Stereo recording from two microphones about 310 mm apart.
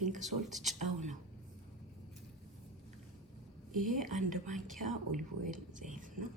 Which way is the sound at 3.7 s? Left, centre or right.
Right.